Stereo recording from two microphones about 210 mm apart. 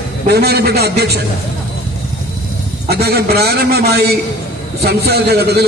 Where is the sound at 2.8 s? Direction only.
50° right (ahead or behind).